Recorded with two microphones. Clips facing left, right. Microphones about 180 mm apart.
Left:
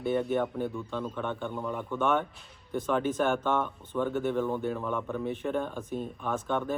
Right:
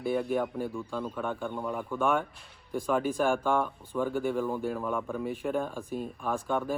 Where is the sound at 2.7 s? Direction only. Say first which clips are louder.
Even; centre (ahead or behind).